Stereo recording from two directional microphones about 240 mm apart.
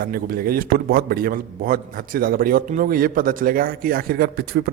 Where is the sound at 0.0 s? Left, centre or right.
Right.